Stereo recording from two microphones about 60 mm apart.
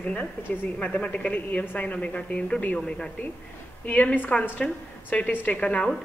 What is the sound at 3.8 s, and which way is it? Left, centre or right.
A woman's voice, left.